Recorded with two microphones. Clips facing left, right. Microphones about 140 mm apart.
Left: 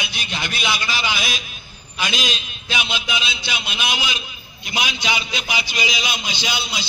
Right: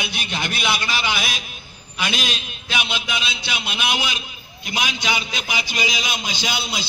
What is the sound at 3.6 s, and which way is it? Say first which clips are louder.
A man's voice: right 2 dB; 55° right (ahead or behind).